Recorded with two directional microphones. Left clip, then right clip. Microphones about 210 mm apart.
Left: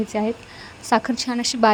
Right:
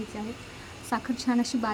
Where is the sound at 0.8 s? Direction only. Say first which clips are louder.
Left 9 dB; 35° left (ahead or behind).